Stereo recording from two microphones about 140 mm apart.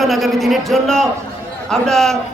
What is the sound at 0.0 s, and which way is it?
A woman's voice, centre (ahead or behind).